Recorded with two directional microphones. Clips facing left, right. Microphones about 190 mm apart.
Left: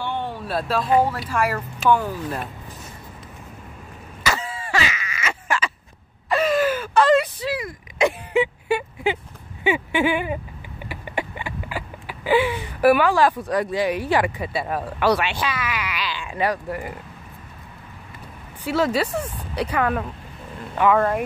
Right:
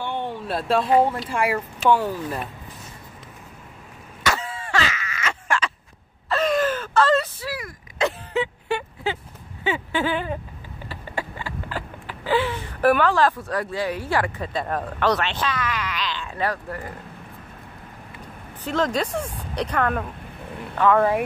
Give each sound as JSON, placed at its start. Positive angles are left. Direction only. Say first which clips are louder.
{"t": 0.0, "sound": "speech", "louder": "even", "side_deg": -15}
{"t": 1.3, "sound": "speech", "louder": "even", "side_deg": -15}
{"t": 4.2, "sound": "a sound", "louder": "even", "side_deg": 0}
{"t": 18.6, "sound": "speech", "louder": "left 2 dB", "side_deg": 10}